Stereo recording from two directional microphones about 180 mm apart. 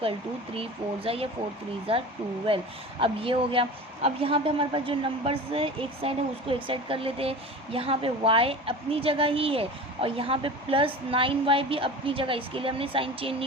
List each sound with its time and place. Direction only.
0.5 s a woman's voice: 30° right (ahead or behind)